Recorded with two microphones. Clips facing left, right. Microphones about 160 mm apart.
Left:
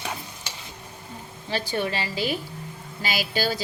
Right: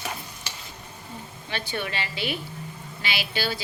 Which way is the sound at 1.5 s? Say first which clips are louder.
Left 5 dB; 35° left (ahead or behind).